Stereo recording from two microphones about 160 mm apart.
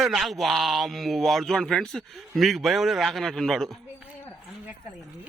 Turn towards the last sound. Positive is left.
turn(degrees=0)  # may be behind; listen again after turning